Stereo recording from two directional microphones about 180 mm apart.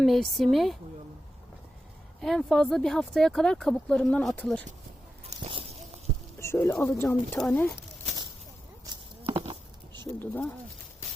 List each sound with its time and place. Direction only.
0.0 s speech: centre (ahead or behind)
2.2 s speech: centre (ahead or behind)
5.3 s a sound: 20° right (ahead or behind)
6.4 s speech: 15° left (ahead or behind)
6.8 s speech: centre (ahead or behind)
8.9 s a sound: 30° right (ahead or behind)
10.2 s speech: 10° left (ahead or behind)